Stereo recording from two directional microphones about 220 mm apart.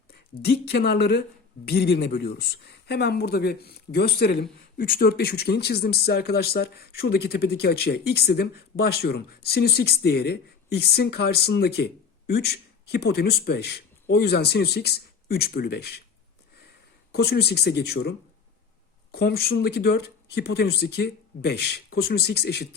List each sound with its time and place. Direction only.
0.1 s speech: 45° left (ahead or behind)
17.1 s speech: 45° left (ahead or behind)
19.1 s speech: 45° left (ahead or behind)